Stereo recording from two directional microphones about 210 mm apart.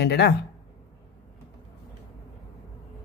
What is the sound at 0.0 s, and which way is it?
Speech, 50° left (ahead or behind).